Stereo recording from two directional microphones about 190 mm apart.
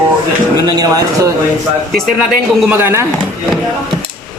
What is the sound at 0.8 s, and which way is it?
Speech, 20° right (ahead or behind).